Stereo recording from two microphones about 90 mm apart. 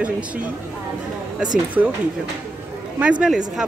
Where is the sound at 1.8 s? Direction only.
20° right (ahead or behind).